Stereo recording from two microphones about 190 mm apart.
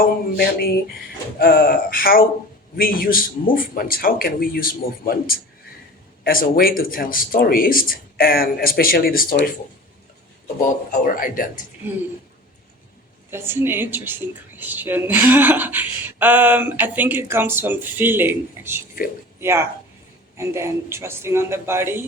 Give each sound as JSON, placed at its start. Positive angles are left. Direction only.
{"t": 0.0, "sound": "speech", "side_deg": 50}
{"t": 11.0, "sound": "speech", "side_deg": 45}
{"t": 13.3, "sound": "a woman's voice", "side_deg": -10}